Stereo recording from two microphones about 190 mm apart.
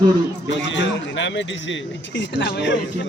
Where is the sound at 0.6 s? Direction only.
75° left (ahead or behind).